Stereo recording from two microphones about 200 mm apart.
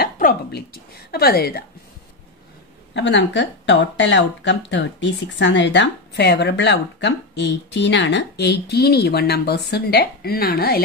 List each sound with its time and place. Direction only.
0.0 s speech: 50° left (ahead or behind)
2.9 s speech: 65° left (ahead or behind)